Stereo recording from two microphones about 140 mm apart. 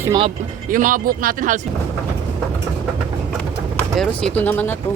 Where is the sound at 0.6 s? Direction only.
70° right (ahead or behind).